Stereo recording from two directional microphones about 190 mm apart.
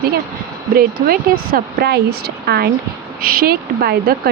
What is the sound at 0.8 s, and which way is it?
Speech, 50° right (ahead or behind).